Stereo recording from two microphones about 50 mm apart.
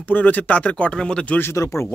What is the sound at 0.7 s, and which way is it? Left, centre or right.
Speech, centre.